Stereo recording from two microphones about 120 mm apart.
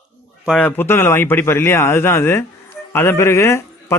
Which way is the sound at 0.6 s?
20° left (ahead or behind).